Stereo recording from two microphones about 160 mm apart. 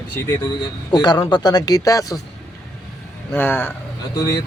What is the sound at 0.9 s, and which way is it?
Speech, 25° left (ahead or behind).